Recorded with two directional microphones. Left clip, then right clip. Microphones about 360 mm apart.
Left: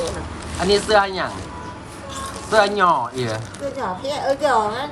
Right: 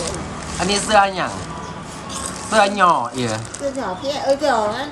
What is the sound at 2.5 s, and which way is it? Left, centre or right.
A woman's voice, centre.